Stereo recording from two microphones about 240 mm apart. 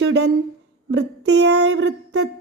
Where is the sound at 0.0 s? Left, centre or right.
Right.